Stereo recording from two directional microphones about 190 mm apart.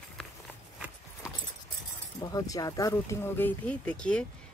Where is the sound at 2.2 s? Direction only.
20° left (ahead or behind).